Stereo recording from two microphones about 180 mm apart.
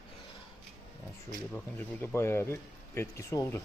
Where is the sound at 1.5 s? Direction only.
10° left (ahead or behind).